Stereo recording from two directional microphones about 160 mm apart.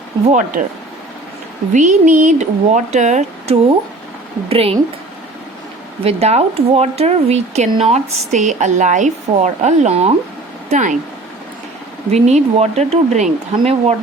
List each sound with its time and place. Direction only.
0.3 s a woman's voice: 50° right (ahead or behind)
1.7 s a woman's voice: 55° right (ahead or behind); by 4.8 s 35° right (ahead or behind)
6.0 s a woman's voice: 40° right (ahead or behind)
12.1 s a woman's voice: 45° right (ahead or behind)